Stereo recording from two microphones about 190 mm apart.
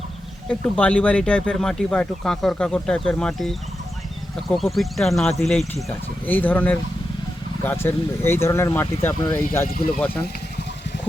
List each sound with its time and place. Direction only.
0.4 s speech: 5° left (ahead or behind)
9.6 s speech: 50° left (ahead or behind)